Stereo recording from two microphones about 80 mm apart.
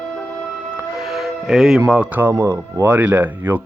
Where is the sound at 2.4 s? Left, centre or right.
Right.